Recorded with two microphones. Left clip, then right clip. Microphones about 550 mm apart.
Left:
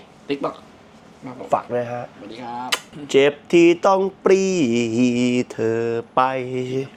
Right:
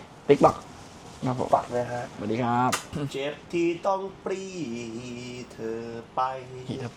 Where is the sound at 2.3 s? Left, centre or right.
Right.